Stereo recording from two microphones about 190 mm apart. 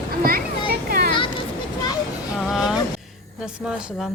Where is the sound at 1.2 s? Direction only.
25° left (ahead or behind).